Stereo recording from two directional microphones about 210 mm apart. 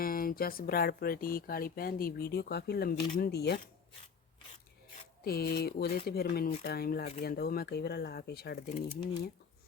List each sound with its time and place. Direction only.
0.0 s speech: 45° left (ahead or behind)
5.2 s speech: 50° left (ahead or behind)